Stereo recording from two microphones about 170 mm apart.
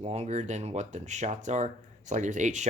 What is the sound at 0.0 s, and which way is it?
Speech, 40° right (ahead or behind).